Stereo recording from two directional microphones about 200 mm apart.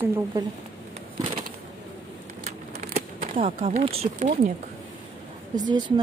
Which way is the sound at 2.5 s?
35° right (ahead or behind).